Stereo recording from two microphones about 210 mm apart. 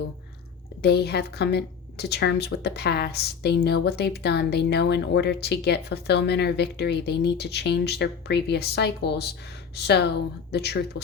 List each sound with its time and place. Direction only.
0.8 s a woman's voice: 50° left (ahead or behind)